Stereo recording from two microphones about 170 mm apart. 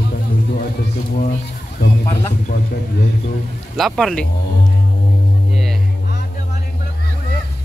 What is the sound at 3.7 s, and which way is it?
Speech, centre (ahead or behind).